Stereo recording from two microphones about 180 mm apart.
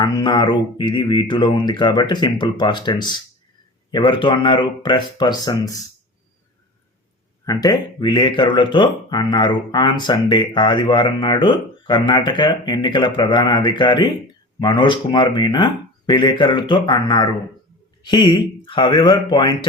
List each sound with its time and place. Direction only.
0.0 s speech: 25° left (ahead or behind)
7.4 s speech: 20° left (ahead or behind)